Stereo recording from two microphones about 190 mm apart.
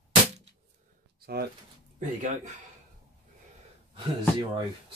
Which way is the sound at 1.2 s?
55° right (ahead or behind).